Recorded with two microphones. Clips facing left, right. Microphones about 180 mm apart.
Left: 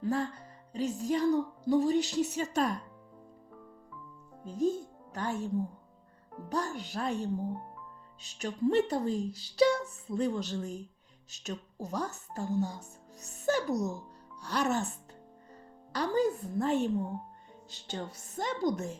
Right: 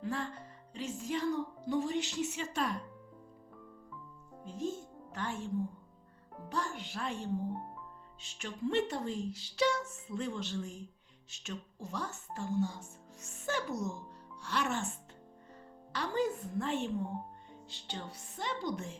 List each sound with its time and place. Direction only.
0.0 s speech: 40° left (ahead or behind)
4.4 s speech: 40° left (ahead or behind)
6.5 s a woman's voice: 40° left (ahead or behind)